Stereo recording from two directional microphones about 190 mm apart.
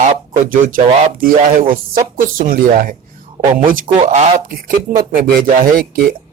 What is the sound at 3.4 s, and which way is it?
Speech, 25° right (ahead or behind).